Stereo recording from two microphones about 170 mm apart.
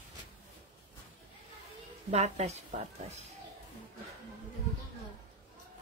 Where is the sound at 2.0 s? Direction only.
40° right (ahead or behind).